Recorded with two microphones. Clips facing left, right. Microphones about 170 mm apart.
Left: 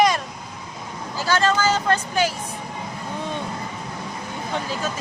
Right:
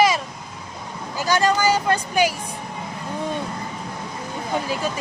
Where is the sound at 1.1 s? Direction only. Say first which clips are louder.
Right 1 dB; 15° right (ahead or behind).